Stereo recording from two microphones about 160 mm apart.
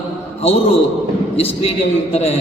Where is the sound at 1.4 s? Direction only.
40° left (ahead or behind).